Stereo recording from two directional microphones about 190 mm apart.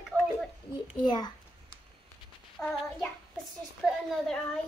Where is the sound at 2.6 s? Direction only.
5° left (ahead or behind).